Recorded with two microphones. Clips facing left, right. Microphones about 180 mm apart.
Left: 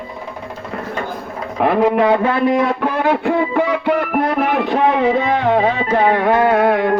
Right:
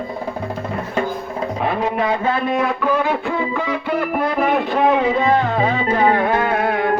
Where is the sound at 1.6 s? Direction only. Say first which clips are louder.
Left 8 dB; 70° left (ahead or behind).